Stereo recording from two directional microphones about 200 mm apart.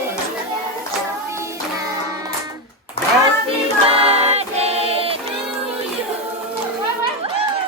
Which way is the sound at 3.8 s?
30° right (ahead or behind).